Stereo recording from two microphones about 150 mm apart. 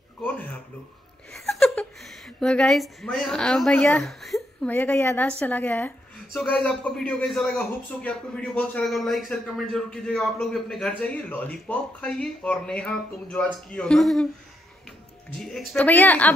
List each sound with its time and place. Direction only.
1.3 s a woman's voice: centre (ahead or behind)
4.6 s speech: 10° left (ahead or behind)
15.3 s speech: centre (ahead or behind)